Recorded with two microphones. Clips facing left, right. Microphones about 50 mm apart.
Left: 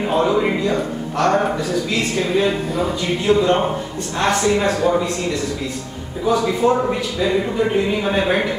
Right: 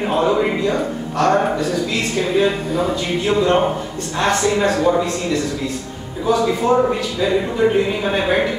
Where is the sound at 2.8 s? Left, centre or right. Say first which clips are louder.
Right 1 dB; centre.